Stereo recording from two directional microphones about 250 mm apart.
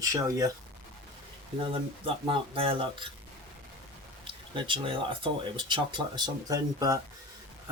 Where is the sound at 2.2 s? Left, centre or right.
Right.